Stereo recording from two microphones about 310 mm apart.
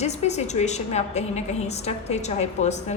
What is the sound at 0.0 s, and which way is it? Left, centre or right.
A woman's voice, left.